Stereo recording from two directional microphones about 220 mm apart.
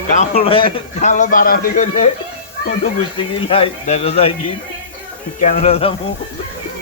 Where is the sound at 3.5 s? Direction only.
30° left (ahead or behind).